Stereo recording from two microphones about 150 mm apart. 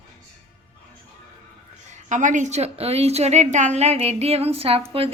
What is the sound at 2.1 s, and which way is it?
A woman's voice, 55° right (ahead or behind).